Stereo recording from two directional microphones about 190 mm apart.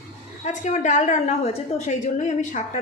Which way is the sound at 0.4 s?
40° left (ahead or behind).